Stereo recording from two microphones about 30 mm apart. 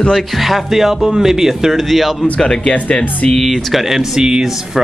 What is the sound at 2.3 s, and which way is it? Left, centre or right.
Speech, left.